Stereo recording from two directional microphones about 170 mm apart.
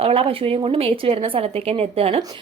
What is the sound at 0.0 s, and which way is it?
A woman's voice, 35° right (ahead or behind).